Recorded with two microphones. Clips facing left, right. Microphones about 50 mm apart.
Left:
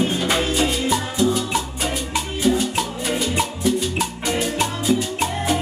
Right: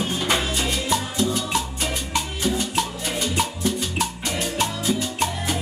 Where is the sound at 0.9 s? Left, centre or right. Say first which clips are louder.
Left 3 dB; centre.